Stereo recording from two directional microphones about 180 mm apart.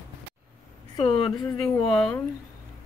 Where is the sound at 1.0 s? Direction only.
30° left (ahead or behind).